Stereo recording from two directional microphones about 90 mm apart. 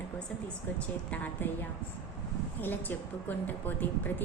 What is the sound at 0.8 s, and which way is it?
Speech, 20° left (ahead or behind).